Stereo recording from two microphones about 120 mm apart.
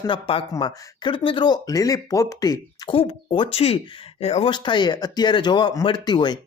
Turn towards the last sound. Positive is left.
turn(degrees=35)  # may be behind; listen again after turning